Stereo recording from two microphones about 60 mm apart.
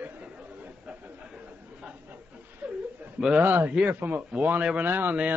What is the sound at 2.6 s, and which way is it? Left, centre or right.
Chuckle, right.